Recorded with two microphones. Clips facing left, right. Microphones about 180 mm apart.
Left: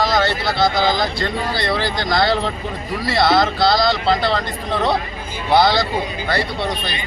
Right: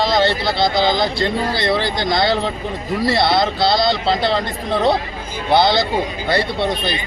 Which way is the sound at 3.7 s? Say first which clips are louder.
Even; 25° right (ahead or behind).